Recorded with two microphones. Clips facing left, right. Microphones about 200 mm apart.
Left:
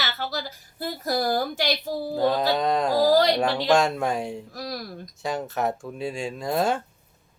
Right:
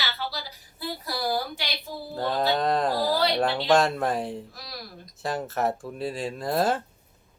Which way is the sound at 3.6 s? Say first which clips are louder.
Even; centre (ahead or behind).